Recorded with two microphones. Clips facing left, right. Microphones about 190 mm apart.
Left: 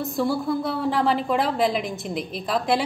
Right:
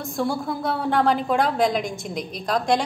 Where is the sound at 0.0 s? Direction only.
Centre (ahead or behind).